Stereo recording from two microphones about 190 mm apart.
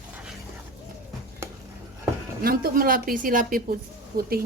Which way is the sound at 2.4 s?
50° right (ahead or behind).